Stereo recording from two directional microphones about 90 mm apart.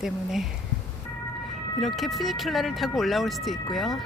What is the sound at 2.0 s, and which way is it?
Speech, centre (ahead or behind).